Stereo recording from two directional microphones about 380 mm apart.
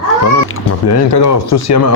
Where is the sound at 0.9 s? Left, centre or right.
Left.